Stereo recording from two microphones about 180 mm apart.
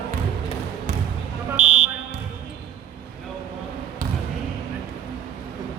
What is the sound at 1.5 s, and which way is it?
Buzzer, 40° right (ahead or behind).